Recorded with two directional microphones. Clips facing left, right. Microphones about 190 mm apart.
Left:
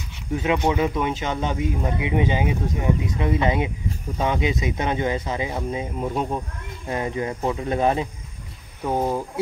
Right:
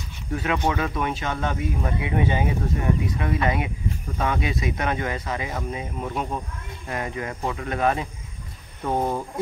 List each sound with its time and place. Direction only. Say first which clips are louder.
0.4 s speech: left 4 dB; 20° left (ahead or behind)
8.8 s speech: left 1 dB; 5° left (ahead or behind)